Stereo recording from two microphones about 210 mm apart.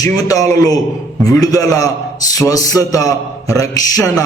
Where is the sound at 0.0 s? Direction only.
15° left (ahead or behind).